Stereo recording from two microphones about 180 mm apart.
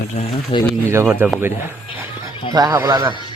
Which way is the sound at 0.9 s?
15° right (ahead or behind).